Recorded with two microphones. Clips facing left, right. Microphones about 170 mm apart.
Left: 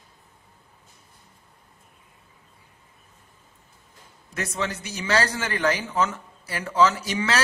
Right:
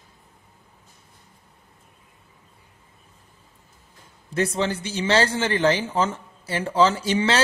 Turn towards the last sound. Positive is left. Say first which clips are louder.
# right 4 dB
turn(degrees=-30)  # may be behind; listen again after turning